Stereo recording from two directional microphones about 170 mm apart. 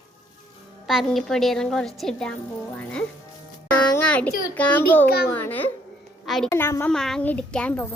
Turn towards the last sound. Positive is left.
turn(degrees=5)  # may be behind; listen again after turning